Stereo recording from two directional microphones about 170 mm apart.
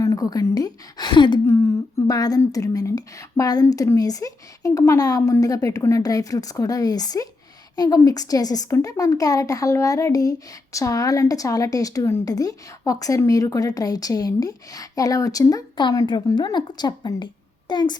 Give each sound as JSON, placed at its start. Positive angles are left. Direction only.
{"t": 0.0, "sound": "speech", "side_deg": 20}